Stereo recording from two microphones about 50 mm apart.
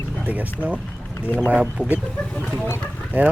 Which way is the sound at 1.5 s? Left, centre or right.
Right.